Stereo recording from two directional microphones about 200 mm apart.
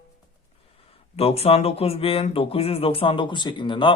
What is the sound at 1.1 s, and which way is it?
Speech, 30° left (ahead or behind).